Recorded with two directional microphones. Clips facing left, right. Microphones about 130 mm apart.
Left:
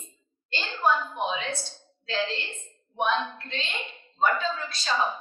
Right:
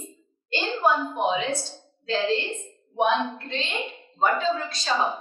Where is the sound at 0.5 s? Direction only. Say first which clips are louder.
Right 3 dB; 15° right (ahead or behind).